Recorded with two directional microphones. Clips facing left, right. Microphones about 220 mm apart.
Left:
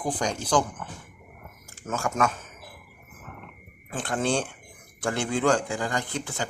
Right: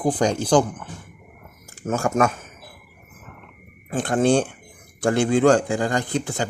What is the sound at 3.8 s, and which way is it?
Speech, 50° right (ahead or behind).